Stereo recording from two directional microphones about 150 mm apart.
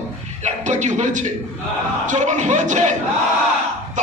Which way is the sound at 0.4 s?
50° right (ahead or behind).